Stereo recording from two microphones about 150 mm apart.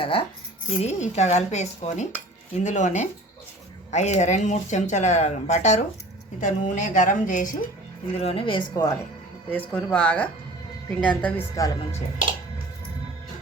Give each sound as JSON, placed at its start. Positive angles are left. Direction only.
{"t": 0.0, "sound": "speech", "side_deg": 35}
{"t": 0.8, "sound": "a woman's voice", "side_deg": 50}
{"t": 8.2, "sound": "speech", "side_deg": 40}
{"t": 8.7, "sound": "a woman's voice", "side_deg": 25}
{"t": 9.5, "sound": "speech", "side_deg": 10}
{"t": 11.5, "sound": "a woman's voice", "side_deg": 20}